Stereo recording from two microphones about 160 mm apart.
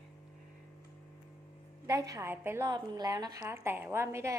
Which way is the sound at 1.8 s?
20° right (ahead or behind).